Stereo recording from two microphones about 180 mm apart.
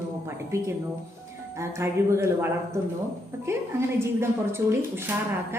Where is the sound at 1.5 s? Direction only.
15° right (ahead or behind).